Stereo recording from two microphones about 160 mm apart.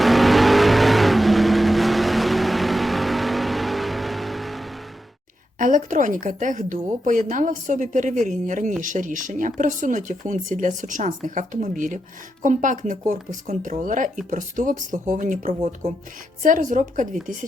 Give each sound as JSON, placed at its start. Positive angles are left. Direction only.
{"t": 0.0, "sound": "vehicle", "side_deg": 0}
{"t": 5.5, "sound": "speech", "side_deg": -55}